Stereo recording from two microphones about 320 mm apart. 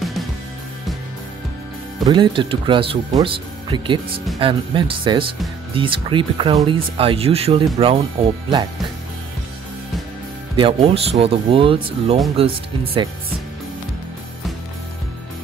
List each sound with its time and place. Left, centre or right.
2.0 s speech: centre
10.5 s speech: centre